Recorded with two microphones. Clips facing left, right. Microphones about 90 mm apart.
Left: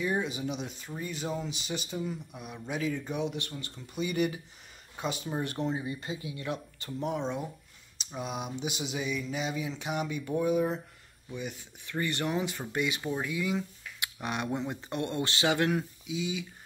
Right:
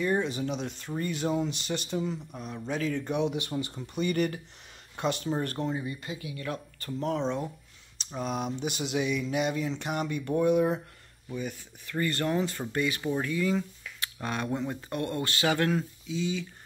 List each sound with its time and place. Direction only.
0.0 s speech: 5° left (ahead or behind)
3.5 s speech: 15° right (ahead or behind)
3.8 s speech: 5° left (ahead or behind)
5.4 s speech: 15° left (ahead or behind); by 10.8 s centre (ahead or behind)
11.3 s speech: 15° left (ahead or behind)